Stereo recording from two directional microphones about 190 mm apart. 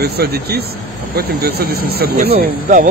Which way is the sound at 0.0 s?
55° right (ahead or behind).